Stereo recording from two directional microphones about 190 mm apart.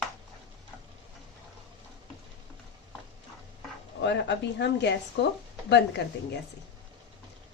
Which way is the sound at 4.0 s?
65° left (ahead or behind).